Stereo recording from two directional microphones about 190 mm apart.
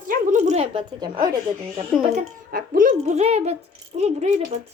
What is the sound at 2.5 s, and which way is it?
A woman's voice, 45° right (ahead or behind).